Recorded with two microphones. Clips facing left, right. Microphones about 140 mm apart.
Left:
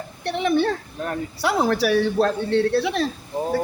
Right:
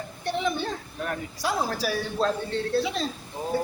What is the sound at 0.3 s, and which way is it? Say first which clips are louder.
Speech: left 7 dB; 65° left (ahead or behind).